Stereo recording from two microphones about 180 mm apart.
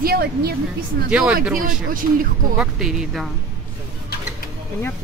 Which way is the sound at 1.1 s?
5° right (ahead or behind).